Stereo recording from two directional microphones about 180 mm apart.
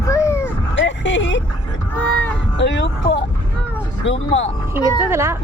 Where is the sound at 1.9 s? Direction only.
10° left (ahead or behind).